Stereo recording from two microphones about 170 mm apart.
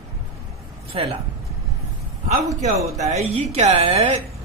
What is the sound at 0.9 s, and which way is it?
Speech, 35° right (ahead or behind).